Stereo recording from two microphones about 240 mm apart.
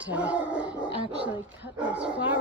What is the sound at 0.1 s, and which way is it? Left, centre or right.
Speech, centre.